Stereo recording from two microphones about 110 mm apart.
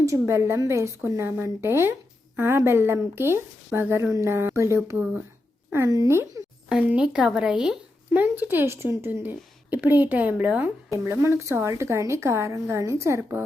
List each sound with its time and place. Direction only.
0.0 s a woman's voice: 25° right (ahead or behind)
6.7 s a woman's voice: 10° right (ahead or behind); by 13.4 s 25° right (ahead or behind)